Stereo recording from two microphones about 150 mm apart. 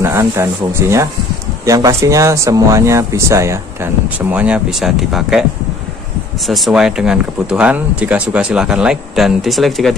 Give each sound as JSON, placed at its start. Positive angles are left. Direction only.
{"t": 0.0, "sound": "speech", "side_deg": -20}
{"t": 6.4, "sound": "speech", "side_deg": 0}